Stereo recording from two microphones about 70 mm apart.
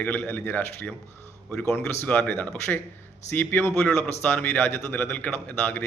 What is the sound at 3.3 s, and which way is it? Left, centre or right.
A man's voice, left.